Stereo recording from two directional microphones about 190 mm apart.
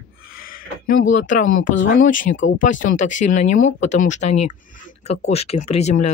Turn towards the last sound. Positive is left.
turn(degrees=35)  # may be behind; listen again after turning